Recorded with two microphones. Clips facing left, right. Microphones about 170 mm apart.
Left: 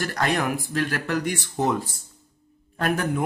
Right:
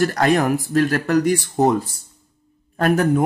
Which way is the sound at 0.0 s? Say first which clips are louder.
Right 7 dB; 40° right (ahead or behind).